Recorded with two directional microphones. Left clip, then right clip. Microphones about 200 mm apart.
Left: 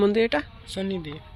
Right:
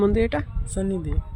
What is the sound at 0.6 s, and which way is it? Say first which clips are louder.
Speech: right 2 dB; 45° right (ahead or behind).